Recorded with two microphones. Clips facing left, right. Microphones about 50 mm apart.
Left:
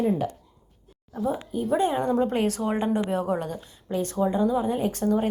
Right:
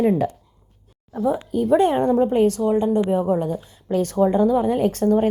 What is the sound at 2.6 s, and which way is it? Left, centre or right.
Speech, left.